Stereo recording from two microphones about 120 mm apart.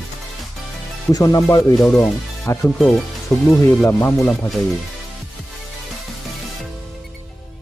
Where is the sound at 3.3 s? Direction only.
5° left (ahead or behind).